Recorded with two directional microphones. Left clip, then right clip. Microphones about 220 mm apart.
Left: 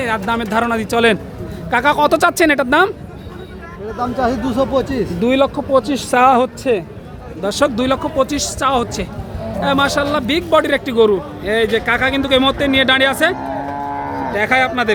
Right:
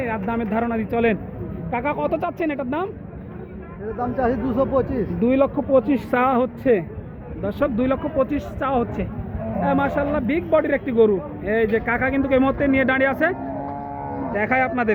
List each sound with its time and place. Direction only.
0.0 s a man's voice: 15° left (ahead or behind); by 2.9 s 40° left (ahead or behind)
4.2 s speech: 65° left (ahead or behind)
5.2 s a man's voice: 10° left (ahead or behind)
14.3 s a man's voice: 5° left (ahead or behind)